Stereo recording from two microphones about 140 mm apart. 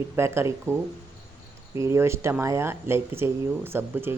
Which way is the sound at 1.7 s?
20° right (ahead or behind).